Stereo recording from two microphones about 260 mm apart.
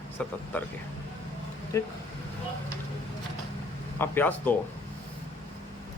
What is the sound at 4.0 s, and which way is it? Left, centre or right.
Speech, centre.